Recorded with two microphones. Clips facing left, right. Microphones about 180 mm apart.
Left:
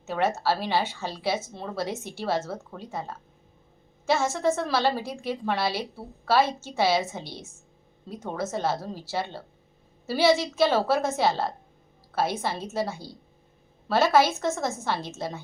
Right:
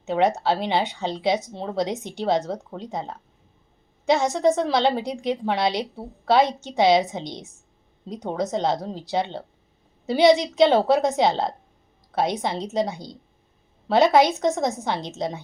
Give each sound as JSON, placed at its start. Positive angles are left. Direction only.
{"t": 0.0, "sound": "speech", "side_deg": -15}